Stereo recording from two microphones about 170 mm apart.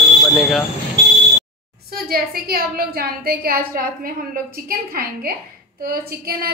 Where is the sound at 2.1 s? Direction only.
60° right (ahead or behind).